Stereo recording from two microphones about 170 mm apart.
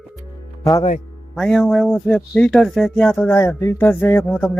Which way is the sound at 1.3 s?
Centre (ahead or behind).